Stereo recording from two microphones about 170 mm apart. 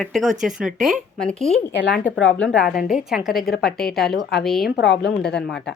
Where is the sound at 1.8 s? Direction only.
90° left.